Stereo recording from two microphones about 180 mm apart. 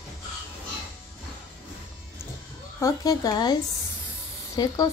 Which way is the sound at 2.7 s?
20° left (ahead or behind).